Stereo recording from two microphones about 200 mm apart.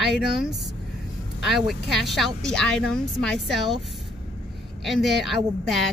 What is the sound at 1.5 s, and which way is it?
Speech, centre (ahead or behind).